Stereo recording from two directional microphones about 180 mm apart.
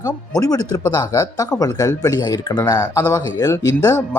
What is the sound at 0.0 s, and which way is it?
Speech, 20° left (ahead or behind).